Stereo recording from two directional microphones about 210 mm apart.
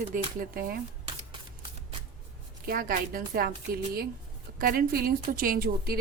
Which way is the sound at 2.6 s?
45° right (ahead or behind).